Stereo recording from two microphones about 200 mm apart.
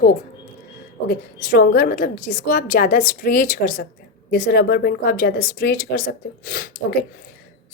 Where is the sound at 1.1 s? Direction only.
45° left (ahead or behind).